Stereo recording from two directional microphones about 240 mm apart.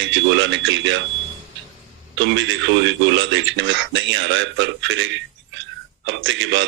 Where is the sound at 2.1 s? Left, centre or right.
Right.